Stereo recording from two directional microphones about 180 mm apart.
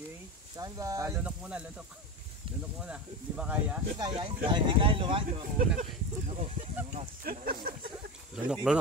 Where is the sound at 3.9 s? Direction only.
25° right (ahead or behind).